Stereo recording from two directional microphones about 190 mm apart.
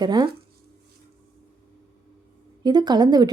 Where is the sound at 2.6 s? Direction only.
20° right (ahead or behind).